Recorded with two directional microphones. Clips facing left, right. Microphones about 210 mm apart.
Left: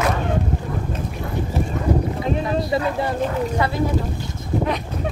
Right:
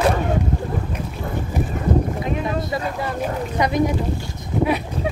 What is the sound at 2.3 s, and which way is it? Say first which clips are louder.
Speech: left 4 dB; 25° left (ahead or behind).